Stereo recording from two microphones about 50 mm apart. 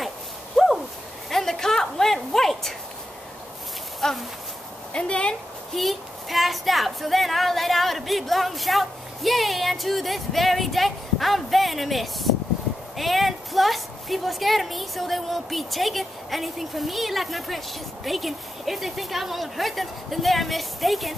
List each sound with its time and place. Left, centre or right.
0.6 s a sound: centre
4.0 s speech: centre
4.9 s speech: centre
5.7 s a woman's voice: centre